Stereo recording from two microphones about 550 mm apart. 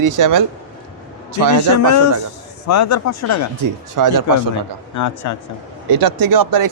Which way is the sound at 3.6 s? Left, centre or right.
Right.